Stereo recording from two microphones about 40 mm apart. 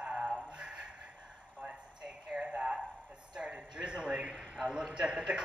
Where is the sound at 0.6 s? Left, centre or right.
Right.